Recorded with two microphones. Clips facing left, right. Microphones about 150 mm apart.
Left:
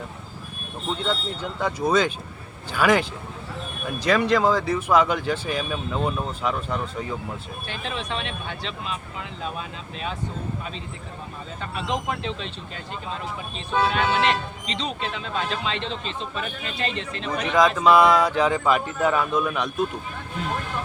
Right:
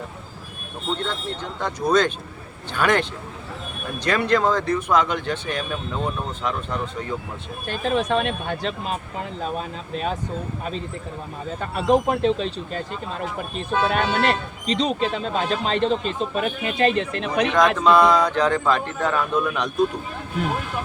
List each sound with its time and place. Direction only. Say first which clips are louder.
0.9 s speech: left 1 dB; 10° left (ahead or behind)
7.7 s speech: right 10 dB; 45° right (ahead or behind)
11.6 s speech: right 9 dB; 45° right (ahead or behind)
17.7 s a man's voice: even; 10° left (ahead or behind)